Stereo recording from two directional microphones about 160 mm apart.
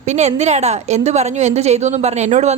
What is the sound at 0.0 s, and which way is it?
A woman's voice, 45° right (ahead or behind).